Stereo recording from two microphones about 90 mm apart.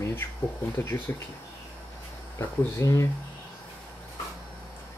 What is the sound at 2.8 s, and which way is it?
Speech, 35° left (ahead or behind).